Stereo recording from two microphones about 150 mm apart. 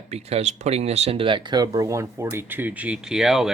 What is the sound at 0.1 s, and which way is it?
Speech, 45° right (ahead or behind).